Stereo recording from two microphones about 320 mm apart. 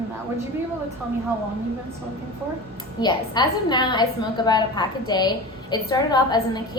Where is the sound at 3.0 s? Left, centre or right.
Centre.